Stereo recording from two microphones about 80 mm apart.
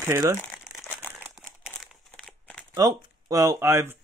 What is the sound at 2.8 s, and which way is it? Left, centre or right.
Speech, right.